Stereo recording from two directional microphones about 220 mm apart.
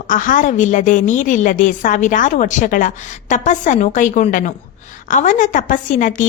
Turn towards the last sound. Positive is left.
turn(degrees=35)  # may be behind; listen again after turning